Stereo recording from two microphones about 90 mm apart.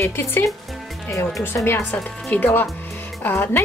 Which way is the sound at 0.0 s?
30° left (ahead or behind).